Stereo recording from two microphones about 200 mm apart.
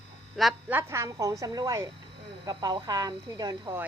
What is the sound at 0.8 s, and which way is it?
Speech, 15° right (ahead or behind).